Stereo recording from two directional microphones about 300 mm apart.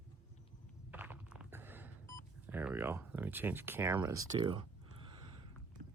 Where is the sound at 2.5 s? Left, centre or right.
Centre.